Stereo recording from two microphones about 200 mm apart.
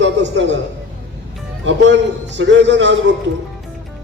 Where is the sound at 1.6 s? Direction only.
65° right (ahead or behind).